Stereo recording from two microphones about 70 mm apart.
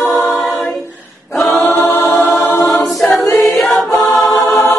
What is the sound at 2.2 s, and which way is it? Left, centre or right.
Choir, left.